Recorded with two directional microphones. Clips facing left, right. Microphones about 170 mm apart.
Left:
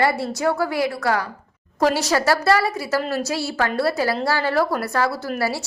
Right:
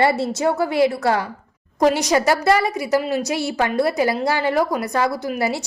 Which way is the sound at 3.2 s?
20° right (ahead or behind).